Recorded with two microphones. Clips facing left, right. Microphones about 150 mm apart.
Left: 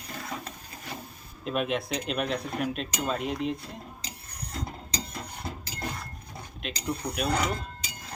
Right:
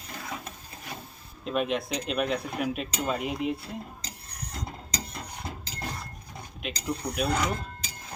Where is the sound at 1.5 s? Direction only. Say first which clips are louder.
Right 1 dB; centre (ahead or behind).